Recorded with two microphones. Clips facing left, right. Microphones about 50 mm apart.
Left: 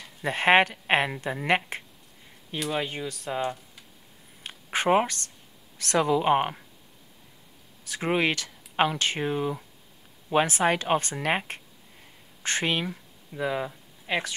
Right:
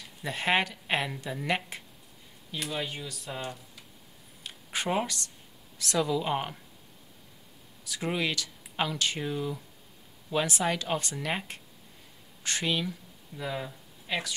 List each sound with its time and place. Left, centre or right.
0.2 s speech: left
4.4 s a sound: left
5.8 s speech: left
7.8 s speech: left